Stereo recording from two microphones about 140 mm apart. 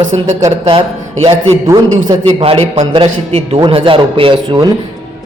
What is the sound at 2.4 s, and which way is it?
A man's voice, 45° right (ahead or behind).